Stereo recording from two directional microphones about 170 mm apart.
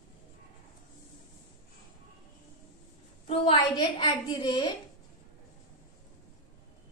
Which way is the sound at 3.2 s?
30° left (ahead or behind).